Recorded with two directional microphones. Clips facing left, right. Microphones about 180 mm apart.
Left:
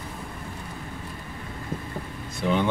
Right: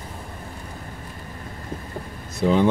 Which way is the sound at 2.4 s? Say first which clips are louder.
Right 5 dB; 35° right (ahead or behind).